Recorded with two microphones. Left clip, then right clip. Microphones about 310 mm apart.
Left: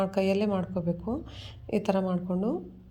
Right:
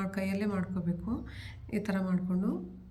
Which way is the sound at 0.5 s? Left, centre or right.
Left.